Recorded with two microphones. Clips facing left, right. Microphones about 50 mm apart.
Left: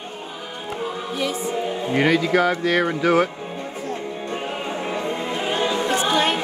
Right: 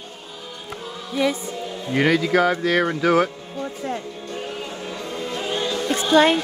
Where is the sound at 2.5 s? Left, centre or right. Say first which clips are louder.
Even; centre.